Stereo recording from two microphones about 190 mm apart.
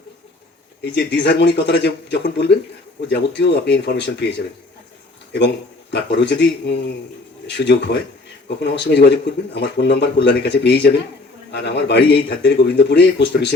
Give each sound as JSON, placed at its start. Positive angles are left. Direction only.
{"t": 0.9, "sound": "a man's voice", "side_deg": 65}
{"t": 5.9, "sound": "a man's voice", "side_deg": 65}